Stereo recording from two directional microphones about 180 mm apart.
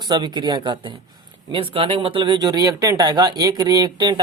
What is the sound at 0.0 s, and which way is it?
Speech, 25° right (ahead or behind).